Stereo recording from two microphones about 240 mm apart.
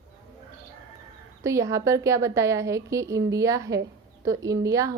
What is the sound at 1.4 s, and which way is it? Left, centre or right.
Speech, centre.